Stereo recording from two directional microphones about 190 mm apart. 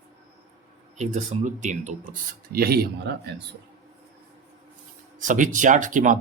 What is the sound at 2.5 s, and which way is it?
Speech, 55° right (ahead or behind).